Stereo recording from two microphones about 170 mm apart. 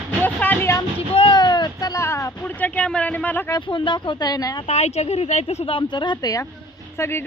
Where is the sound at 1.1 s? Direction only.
30° left (ahead or behind); by 3.6 s 10° left (ahead or behind).